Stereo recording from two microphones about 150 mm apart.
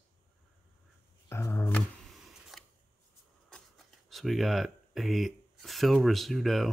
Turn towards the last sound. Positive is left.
turn(degrees=0)  # may be behind; listen again after turning